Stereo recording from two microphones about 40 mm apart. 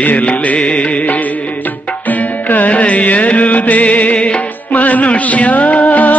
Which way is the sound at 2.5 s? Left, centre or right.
Left.